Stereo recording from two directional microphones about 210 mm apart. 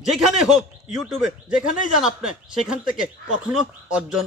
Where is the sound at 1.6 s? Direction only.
40° left (ahead or behind).